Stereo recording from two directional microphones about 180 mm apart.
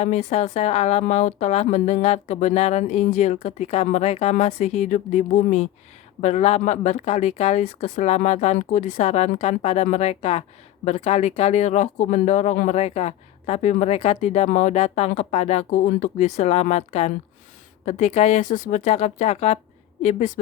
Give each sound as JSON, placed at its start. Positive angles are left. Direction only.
{"t": 0.0, "sound": "speech", "side_deg": 40}